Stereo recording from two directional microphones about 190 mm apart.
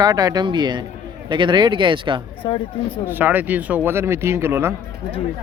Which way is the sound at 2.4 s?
25° left (ahead or behind).